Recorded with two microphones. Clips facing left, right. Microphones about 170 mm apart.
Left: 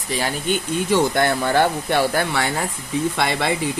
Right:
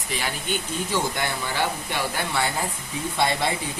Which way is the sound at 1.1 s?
65° left (ahead or behind).